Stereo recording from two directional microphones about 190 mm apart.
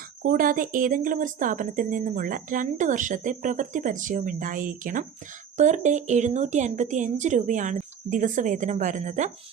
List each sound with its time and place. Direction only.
0.2 s a woman's voice: 45° right (ahead or behind)